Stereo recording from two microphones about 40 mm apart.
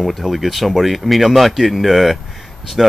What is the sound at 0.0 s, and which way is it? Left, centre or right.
Speech, centre.